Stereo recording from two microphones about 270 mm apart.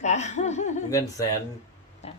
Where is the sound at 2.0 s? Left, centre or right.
Left.